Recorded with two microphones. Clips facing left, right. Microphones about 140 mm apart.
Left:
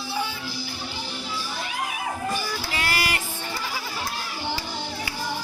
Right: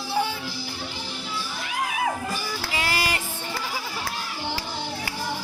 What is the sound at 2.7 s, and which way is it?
Music, 20° right (ahead or behind).